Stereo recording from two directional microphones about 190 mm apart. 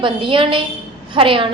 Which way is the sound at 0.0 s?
25° right (ahead or behind).